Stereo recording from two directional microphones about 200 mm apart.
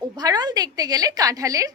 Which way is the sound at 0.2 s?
20° right (ahead or behind).